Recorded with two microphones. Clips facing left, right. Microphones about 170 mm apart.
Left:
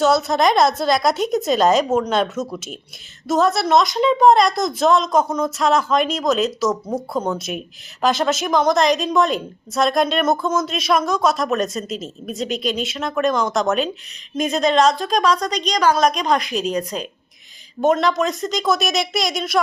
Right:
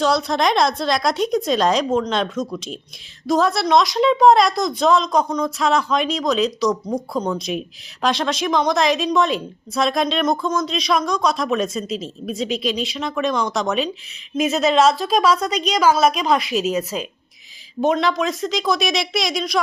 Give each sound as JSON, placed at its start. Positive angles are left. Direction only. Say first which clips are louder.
{"t": 0.0, "sound": "a woman's voice", "louder": "left 2 dB", "side_deg": 0}